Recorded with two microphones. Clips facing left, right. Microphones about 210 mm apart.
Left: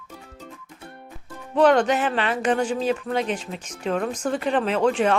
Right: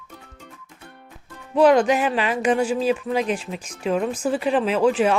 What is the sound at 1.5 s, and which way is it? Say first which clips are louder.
Speech: right 2 dB; 10° right (ahead or behind).